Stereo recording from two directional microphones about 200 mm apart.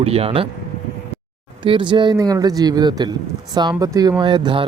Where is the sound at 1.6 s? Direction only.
25° right (ahead or behind).